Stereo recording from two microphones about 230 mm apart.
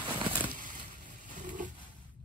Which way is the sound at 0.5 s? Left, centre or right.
Right.